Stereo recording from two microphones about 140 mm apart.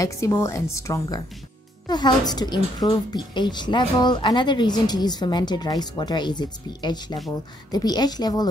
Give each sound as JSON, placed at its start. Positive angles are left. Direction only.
{"t": 0.0, "sound": "a woman's voice", "side_deg": 20}